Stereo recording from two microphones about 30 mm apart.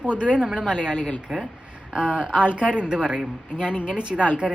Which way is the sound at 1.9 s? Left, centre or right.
Right.